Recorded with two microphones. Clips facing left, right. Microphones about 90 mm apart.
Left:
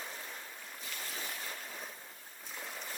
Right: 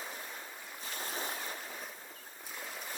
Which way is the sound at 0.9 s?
35° right (ahead or behind).